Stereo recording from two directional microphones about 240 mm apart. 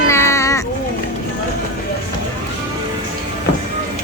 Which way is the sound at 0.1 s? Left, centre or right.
Centre.